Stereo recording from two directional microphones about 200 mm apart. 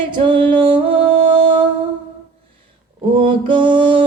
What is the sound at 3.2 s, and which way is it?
Music, 25° right (ahead or behind).